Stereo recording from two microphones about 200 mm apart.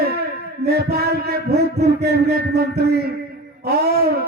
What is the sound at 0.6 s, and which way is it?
Speech, 50° right (ahead or behind).